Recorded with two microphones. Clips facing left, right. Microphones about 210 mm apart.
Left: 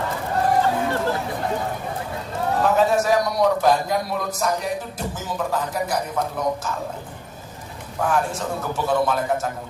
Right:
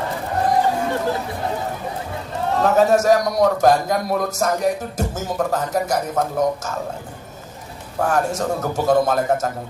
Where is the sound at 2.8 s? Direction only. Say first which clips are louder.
Right 6 dB; 45° right (ahead or behind).